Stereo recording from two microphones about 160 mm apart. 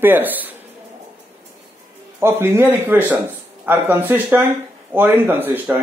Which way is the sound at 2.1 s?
15° right (ahead or behind).